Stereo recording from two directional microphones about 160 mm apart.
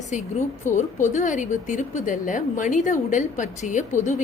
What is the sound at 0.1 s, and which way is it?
A woman's voice, 50° left (ahead or behind).